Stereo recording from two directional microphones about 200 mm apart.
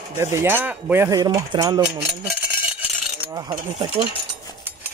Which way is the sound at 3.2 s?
20° right (ahead or behind).